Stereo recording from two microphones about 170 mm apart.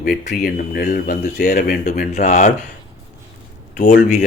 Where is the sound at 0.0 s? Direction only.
60° left (ahead or behind).